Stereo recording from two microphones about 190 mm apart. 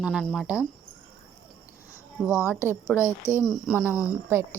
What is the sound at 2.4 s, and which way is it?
Speech, 10° right (ahead or behind).